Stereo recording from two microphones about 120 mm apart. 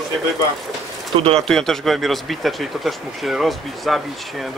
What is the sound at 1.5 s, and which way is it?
Speech, 5° left (ahead or behind).